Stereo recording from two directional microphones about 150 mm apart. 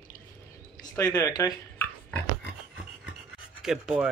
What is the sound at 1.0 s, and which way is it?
Speech, 25° left (ahead or behind).